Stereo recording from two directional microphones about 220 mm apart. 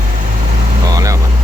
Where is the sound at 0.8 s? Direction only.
15° right (ahead or behind).